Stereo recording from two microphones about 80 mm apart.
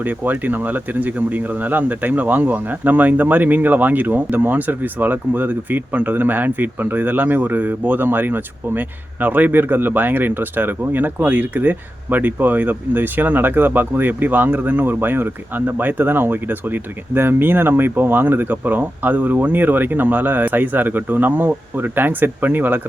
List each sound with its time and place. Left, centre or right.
0.0 s speech: right